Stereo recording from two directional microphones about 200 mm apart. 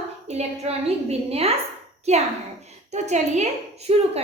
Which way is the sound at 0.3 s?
30° right (ahead or behind).